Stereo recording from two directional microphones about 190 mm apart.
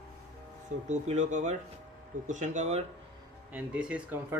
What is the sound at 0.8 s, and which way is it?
Speech, 40° right (ahead or behind).